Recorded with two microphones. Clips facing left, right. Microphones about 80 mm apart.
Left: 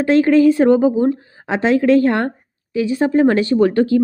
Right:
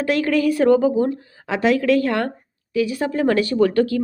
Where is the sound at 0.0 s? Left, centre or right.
Left.